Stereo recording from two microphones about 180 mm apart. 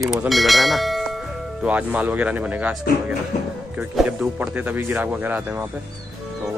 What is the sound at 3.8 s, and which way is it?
Speech, 5° right (ahead or behind).